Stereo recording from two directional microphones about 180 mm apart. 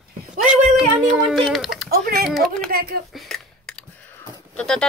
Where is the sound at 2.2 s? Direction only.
Centre (ahead or behind).